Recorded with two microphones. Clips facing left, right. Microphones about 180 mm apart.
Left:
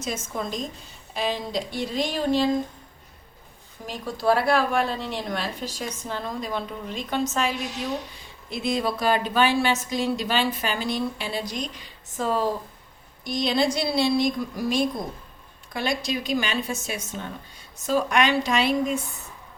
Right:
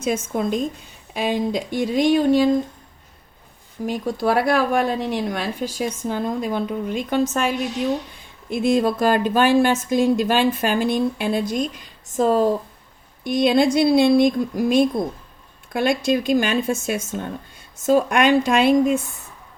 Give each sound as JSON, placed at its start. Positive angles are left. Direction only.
{"t": 0.0, "sound": "speech", "side_deg": -55}
{"t": 3.8, "sound": "speech", "side_deg": -55}
{"t": 13.2, "sound": "speech", "side_deg": -55}